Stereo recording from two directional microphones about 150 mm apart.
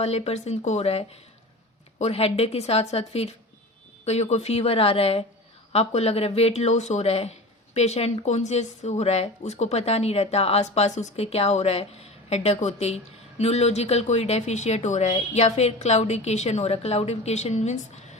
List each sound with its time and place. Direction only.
0.0 s speech: 45° left (ahead or behind)